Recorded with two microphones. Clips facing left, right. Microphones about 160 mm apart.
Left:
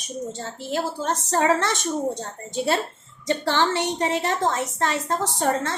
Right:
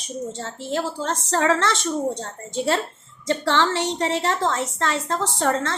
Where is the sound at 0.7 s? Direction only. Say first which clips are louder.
Even; 20° left (ahead or behind).